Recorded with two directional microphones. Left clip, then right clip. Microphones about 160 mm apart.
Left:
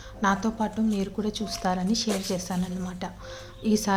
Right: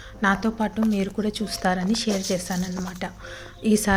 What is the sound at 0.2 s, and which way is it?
A woman's voice, 10° right (ahead or behind).